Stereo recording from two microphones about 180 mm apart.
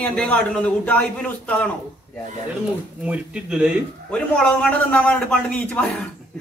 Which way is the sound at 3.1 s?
5° right (ahead or behind).